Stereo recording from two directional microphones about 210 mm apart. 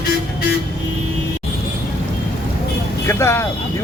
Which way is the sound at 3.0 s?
15° left (ahead or behind).